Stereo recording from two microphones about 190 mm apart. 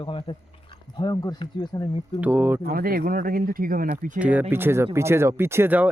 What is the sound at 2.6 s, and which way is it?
Speech, 50° right (ahead or behind).